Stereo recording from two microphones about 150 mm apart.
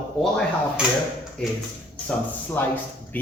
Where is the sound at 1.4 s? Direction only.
5° left (ahead or behind).